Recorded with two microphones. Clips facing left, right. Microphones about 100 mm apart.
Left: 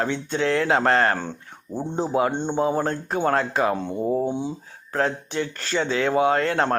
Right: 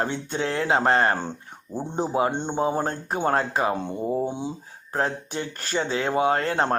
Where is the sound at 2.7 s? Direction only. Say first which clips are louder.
Left 2 dB; 30° right (ahead or behind).